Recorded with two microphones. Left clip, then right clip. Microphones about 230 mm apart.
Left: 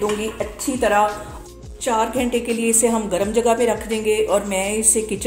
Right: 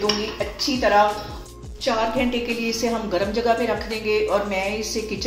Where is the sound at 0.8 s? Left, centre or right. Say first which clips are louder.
Even; left.